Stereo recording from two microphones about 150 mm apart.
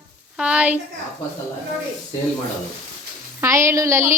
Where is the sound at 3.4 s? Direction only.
20° right (ahead or behind).